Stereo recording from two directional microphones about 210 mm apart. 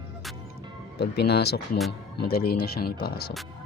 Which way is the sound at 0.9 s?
50° left (ahead or behind).